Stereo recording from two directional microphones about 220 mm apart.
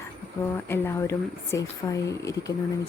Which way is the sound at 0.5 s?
10° left (ahead or behind).